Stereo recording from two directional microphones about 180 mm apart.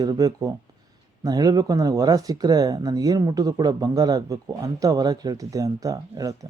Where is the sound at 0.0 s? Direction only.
20° right (ahead or behind).